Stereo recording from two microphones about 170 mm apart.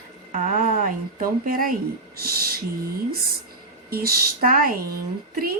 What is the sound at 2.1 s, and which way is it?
Owl, 65° right (ahead or behind).